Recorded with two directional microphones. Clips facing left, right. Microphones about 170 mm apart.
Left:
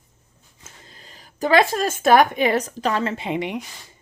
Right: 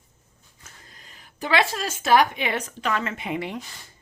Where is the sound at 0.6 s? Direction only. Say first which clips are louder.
Left 4 dB; 25° left (ahead or behind).